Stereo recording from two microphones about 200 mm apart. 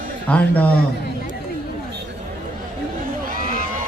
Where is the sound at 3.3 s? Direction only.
45° right (ahead or behind).